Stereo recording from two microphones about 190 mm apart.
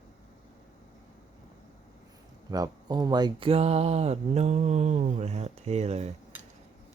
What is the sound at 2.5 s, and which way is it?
Speech, 20° right (ahead or behind).